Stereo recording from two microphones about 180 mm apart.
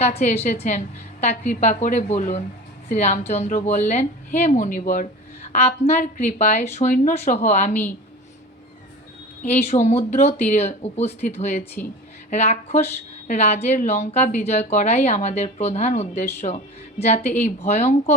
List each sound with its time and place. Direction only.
0.0 s a woman's voice: 40° left (ahead or behind)
7.7 s a woman's voice: 10° left (ahead or behind)
9.6 s a woman's voice: 40° left (ahead or behind)